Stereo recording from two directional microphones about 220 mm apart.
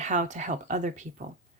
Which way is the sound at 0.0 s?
35° right (ahead or behind).